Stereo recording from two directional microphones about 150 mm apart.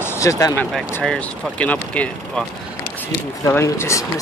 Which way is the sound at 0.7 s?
Centre (ahead or behind).